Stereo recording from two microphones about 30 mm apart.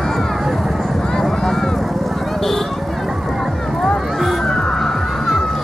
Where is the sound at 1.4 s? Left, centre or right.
Centre.